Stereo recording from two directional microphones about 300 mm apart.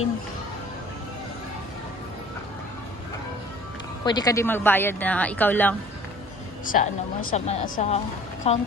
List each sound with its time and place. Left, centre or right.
4.0 s speech: centre
6.7 s speech: left